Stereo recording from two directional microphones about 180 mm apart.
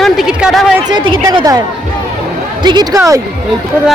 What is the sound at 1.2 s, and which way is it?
Speech, 20° right (ahead or behind).